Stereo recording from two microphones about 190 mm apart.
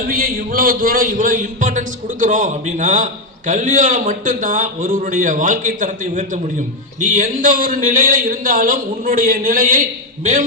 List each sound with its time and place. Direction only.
0.1 s a man's voice: 50° right (ahead or behind)